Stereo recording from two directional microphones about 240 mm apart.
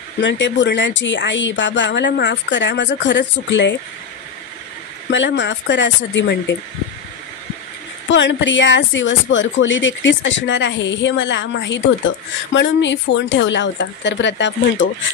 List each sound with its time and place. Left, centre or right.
0.2 s speech: left
5.1 s speech: left
8.1 s speech: left